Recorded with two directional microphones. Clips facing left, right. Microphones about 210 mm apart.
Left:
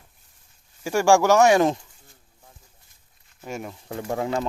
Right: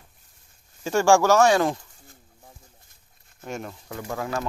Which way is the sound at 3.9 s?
25° left (ahead or behind).